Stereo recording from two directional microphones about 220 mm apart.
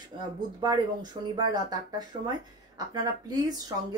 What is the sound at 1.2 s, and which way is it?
Speech, 20° right (ahead or behind).